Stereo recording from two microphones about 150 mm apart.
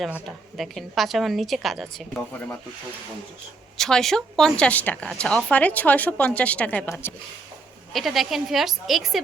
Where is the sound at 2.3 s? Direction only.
10° left (ahead or behind).